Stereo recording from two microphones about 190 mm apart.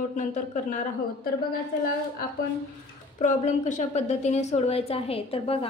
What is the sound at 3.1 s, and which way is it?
A woman's voice, 40° left (ahead or behind).